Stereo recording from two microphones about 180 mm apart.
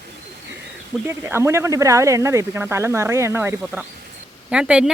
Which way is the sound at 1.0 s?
15° right (ahead or behind).